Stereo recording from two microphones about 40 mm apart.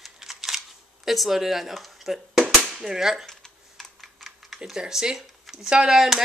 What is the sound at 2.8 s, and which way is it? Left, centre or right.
Speech, centre.